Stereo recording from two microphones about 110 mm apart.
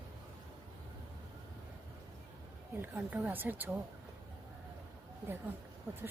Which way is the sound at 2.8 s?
15° right (ahead or behind).